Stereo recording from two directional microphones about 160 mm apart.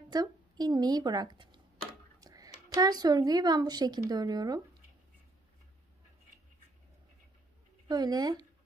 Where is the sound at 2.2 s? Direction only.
20° right (ahead or behind).